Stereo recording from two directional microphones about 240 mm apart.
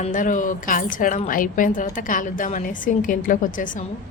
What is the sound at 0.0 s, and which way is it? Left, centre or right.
A woman's voice, left.